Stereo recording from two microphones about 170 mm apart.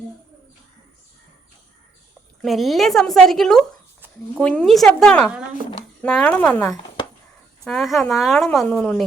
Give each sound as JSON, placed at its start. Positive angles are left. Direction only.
{"t": 2.4, "sound": "a woman's voice", "side_deg": 0}